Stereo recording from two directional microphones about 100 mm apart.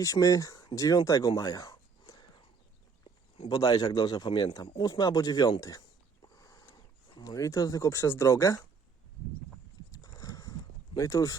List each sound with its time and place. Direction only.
0.0 s speech: 35° left (ahead or behind)
1.4 s a sound: 35° left (ahead or behind)
3.5 s speech: 35° left (ahead or behind)
4.3 s speech: 55° left (ahead or behind); by 5.8 s 35° left (ahead or behind)
6.2 s a sound: 40° left (ahead or behind)
7.2 s speech: 35° left (ahead or behind)
9.9 s horse: 35° left (ahead or behind)
10.9 s speech: 35° left (ahead or behind)